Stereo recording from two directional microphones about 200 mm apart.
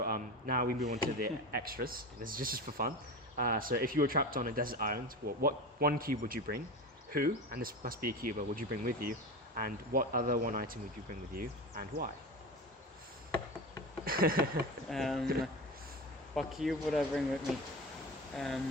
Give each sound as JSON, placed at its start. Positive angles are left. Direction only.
{"t": 0.0, "sound": "a sound", "side_deg": -45}
{"t": 0.9, "sound": "speech", "side_deg": -45}
{"t": 14.0, "sound": "a sound", "side_deg": -45}
{"t": 14.8, "sound": "speech", "side_deg": 0}
{"t": 16.3, "sound": "speech", "side_deg": 0}
{"t": 18.3, "sound": "speech", "side_deg": 0}